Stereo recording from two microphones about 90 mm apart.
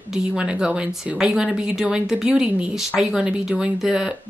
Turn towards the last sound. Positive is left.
turn(degrees=-10)  # may be behind; listen again after turning